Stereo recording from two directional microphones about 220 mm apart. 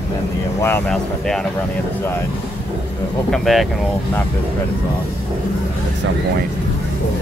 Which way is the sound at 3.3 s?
Centre (ahead or behind).